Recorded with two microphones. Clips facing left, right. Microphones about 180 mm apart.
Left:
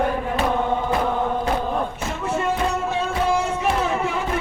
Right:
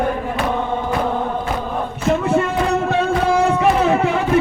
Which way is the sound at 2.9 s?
65° right (ahead or behind).